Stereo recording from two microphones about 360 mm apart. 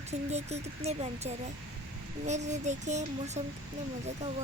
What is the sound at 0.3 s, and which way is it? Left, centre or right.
Speech, centre.